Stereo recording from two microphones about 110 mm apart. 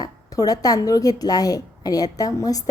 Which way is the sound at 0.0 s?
35° left (ahead or behind).